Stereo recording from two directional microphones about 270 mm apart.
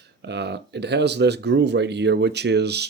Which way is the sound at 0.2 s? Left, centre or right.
Right.